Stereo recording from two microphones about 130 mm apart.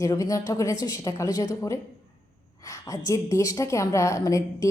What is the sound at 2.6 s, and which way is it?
A woman's voice, 25° left (ahead or behind).